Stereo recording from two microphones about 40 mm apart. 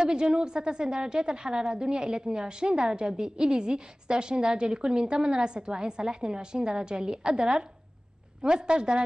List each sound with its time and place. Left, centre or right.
0.0 s a woman's voice: right